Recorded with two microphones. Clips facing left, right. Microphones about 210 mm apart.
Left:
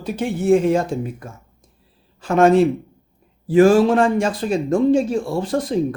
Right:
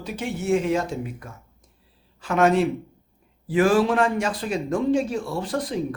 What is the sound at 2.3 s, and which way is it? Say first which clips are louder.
Speech: left 5 dB; 30° left (ahead or behind).